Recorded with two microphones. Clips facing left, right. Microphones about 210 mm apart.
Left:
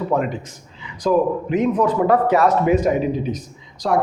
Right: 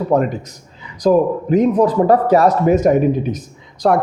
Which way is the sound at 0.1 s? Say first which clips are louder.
Right 7 dB; 40° right (ahead or behind).